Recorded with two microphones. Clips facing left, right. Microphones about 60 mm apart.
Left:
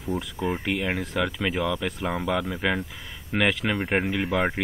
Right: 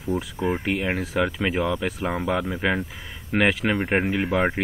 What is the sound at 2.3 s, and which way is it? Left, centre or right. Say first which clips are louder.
Speech: right 1 dB; centre.